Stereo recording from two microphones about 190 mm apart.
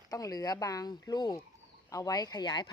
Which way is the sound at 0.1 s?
20° left (ahead or behind).